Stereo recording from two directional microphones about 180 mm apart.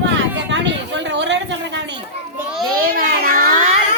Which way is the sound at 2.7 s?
55° right (ahead or behind).